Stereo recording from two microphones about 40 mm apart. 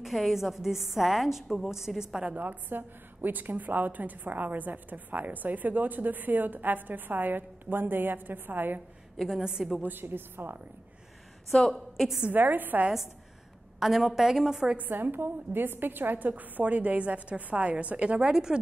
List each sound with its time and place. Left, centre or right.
0.0 s a woman's voice: centre
2.2 s a woman's voice: right
2.7 s a woman's voice: right
9.2 s a woman's voice: centre
9.8 s a woman's voice: right
11.7 s a woman's voice: centre
12.3 s a woman's voice: right
13.7 s a woman's voice: centre
14.8 s a woman's voice: right
18.2 s a woman's voice: centre